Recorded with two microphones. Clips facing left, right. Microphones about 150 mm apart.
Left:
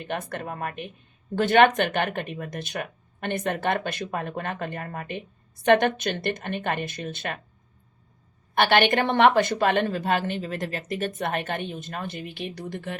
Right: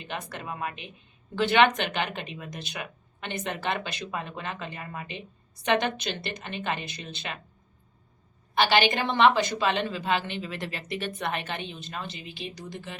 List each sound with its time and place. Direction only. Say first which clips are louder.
0.0 s a woman's voice: left 5 dB; 55° left (ahead or behind)
8.5 s a woman's voice: left 3 dB; 55° left (ahead or behind)